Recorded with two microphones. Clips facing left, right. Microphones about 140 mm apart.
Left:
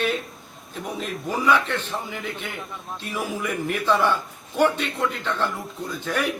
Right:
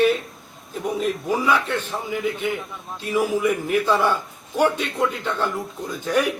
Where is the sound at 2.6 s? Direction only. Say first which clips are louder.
Right 1 dB; centre (ahead or behind).